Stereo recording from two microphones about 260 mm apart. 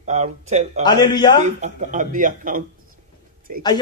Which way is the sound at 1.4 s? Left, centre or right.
Right.